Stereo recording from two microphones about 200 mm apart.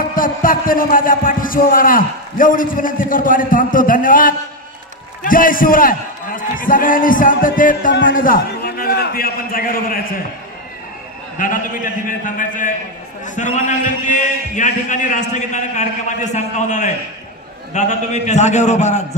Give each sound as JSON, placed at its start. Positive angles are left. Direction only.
{"t": 0.1, "sound": "a man's voice", "side_deg": 45}
{"t": 11.3, "sound": "a man's voice", "side_deg": 40}